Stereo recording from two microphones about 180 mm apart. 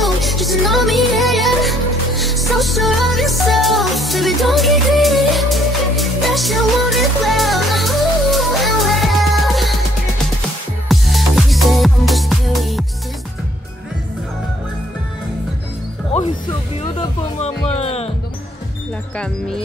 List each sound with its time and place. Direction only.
0.0 s music: centre (ahead or behind)
10.9 s music: centre (ahead or behind)
17.7 s music: 35° left (ahead or behind)